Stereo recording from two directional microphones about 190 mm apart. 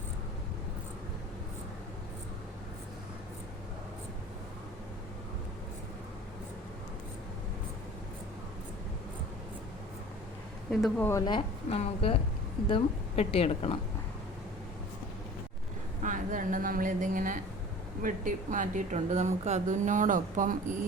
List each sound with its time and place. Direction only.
10.7 s speech: centre (ahead or behind)
11.3 s a woman's voice: 30° left (ahead or behind)
16.0 s a woman's voice: 45° right (ahead or behind)